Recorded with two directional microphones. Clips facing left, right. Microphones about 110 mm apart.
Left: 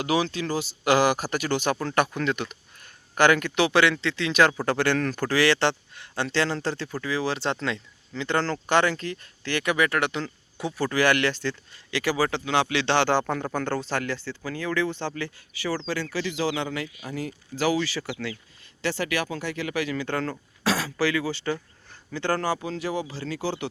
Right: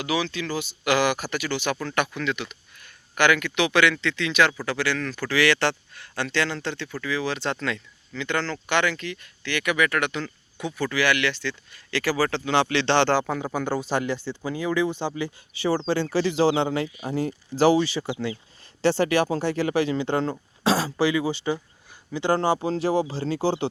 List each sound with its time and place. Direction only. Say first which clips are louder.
0.0 s speech: left 2 dB; 45° left (ahead or behind)
1.7 s speech: left 2 dB; 35° left (ahead or behind)
4.6 s speech: left 3 dB; 50° left (ahead or behind)
5.4 s speech: right 1 dB; 30° left (ahead or behind)
11.9 s speech: right 1 dB; 15° left (ahead or behind)
12.5 s a man's voice: right 4 dB; 5° left (ahead or behind); by 23.6 s 30° right (ahead or behind)